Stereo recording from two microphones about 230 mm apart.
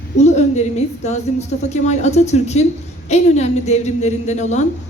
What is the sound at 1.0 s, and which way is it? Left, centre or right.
Speech, left.